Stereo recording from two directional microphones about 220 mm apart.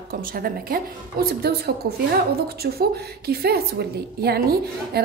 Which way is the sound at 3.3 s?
45° right (ahead or behind).